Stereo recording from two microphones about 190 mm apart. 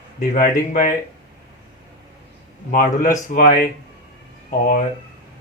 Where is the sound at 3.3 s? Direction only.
45° left (ahead or behind).